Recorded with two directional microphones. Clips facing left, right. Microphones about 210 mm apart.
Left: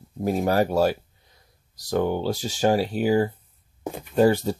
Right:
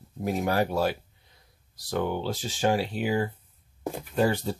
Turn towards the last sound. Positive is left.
turn(degrees=40)  # may be behind; listen again after turning